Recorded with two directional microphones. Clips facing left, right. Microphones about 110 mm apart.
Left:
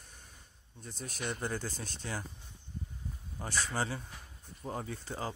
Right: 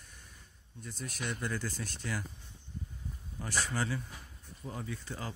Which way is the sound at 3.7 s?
30° left (ahead or behind).